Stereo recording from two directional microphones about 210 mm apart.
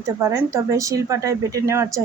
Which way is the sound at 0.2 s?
15° right (ahead or behind).